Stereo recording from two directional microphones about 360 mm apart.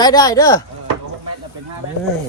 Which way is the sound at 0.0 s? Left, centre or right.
Centre.